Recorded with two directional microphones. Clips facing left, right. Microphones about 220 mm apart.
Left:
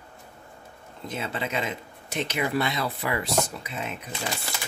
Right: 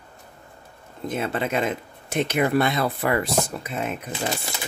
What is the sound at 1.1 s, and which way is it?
Speech, 55° right (ahead or behind).